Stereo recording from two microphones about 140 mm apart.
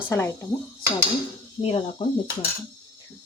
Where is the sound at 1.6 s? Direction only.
45° left (ahead or behind).